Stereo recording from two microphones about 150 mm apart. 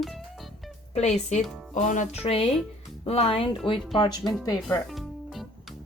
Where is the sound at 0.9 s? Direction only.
50° left (ahead or behind).